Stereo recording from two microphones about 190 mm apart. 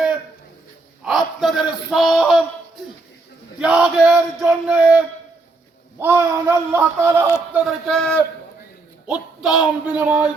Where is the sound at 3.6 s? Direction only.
5° right (ahead or behind).